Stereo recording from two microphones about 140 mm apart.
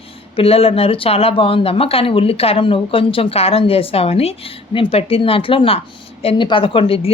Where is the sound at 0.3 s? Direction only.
45° left (ahead or behind).